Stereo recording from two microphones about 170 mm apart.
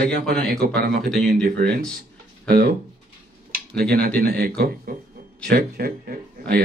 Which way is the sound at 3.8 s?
65° right (ahead or behind).